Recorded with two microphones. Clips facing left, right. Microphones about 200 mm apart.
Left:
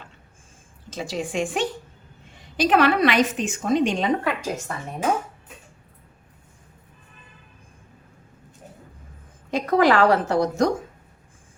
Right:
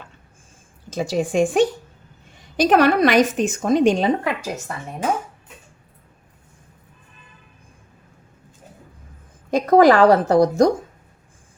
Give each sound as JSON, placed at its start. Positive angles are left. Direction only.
{"t": 0.9, "sound": "a woman's voice", "side_deg": -40}
{"t": 4.2, "sound": "a woman's voice", "side_deg": -10}
{"t": 9.5, "sound": "a woman's voice", "side_deg": -40}